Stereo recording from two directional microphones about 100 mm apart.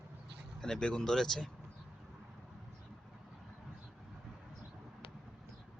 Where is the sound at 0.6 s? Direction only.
10° left (ahead or behind).